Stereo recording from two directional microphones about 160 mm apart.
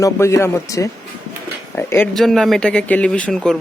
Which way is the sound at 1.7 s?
15° left (ahead or behind).